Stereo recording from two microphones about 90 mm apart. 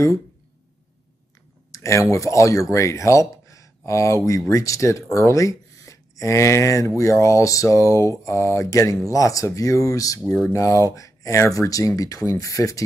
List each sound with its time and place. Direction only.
1.7 s speech: 35° left (ahead or behind)
10.2 s speech: 15° left (ahead or behind)
10.5 s speech: 35° left (ahead or behind)